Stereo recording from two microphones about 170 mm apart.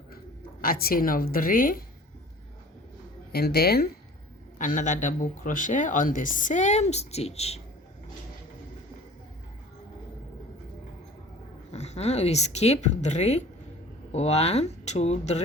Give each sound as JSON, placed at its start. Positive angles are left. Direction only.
{"t": 0.6, "sound": "a woman's voice", "side_deg": 60}
{"t": 3.3, "sound": "speech", "side_deg": 70}
{"t": 4.5, "sound": "speech", "side_deg": 50}
{"t": 11.7, "sound": "a woman's voice", "side_deg": 40}